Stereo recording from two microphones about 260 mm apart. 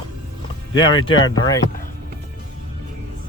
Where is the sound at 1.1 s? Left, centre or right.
Left.